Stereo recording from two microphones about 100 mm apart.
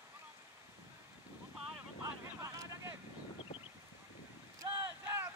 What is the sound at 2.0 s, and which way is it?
Vehicle, 35° right (ahead or behind).